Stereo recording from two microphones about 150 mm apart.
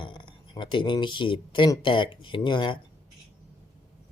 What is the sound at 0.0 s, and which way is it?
Speech, 35° left (ahead or behind).